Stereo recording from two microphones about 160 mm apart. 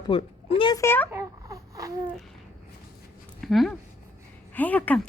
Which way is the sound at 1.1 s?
20° right (ahead or behind).